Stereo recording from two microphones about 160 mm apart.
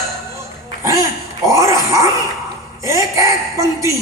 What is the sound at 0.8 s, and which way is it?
A man's voice, 20° right (ahead or behind).